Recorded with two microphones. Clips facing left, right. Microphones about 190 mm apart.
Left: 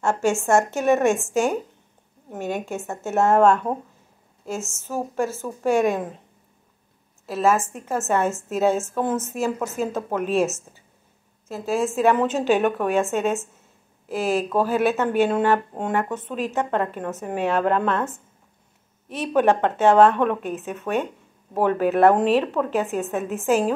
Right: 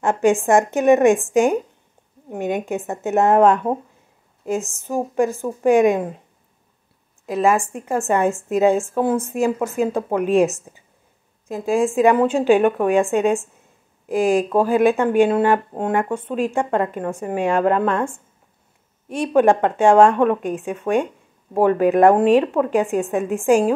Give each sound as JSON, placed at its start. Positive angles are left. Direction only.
{"t": 0.0, "sound": "speech", "side_deg": -15}
{"t": 7.2, "sound": "speech", "side_deg": -15}
{"t": 19.3, "sound": "speech", "side_deg": -10}